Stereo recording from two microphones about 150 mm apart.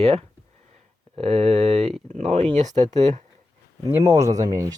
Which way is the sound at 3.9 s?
20° right (ahead or behind).